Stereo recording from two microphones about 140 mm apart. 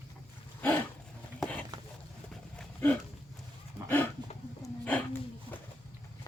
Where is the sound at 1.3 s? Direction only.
10° left (ahead or behind).